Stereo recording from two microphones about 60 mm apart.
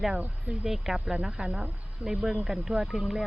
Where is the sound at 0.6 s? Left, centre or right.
Centre.